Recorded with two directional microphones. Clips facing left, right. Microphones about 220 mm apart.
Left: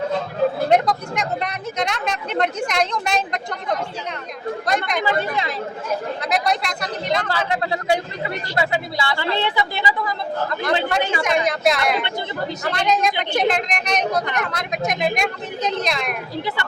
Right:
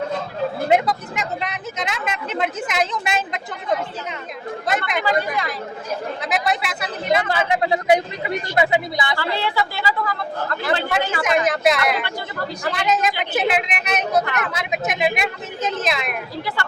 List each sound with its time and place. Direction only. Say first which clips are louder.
0.7 s speech: left 1 dB; 5° right (ahead or behind)
5.0 s a woman's voice: even; 25° left (ahead or behind)
6.2 s speech: even; 5° right (ahead or behind)
7.3 s speech: right 3 dB; 15° right (ahead or behind)
9.1 s a woman's voice: left 2 dB; 20° left (ahead or behind)
10.7 s speech: left 1 dB; 5° right (ahead or behind)